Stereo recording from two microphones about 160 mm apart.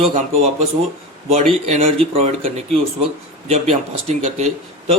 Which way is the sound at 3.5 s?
45° right (ahead or behind).